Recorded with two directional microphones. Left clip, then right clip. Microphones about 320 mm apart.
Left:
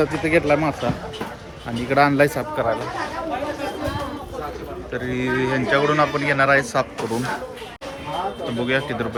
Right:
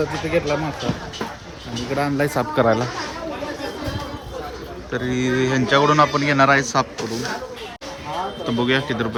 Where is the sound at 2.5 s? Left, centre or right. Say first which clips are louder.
Right 4 dB; right.